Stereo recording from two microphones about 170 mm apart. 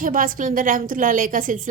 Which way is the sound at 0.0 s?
55° right (ahead or behind).